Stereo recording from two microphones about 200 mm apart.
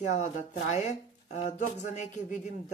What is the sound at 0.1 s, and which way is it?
Speech, 35° left (ahead or behind).